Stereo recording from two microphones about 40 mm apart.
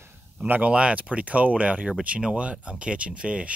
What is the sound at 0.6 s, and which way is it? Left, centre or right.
Speech, right.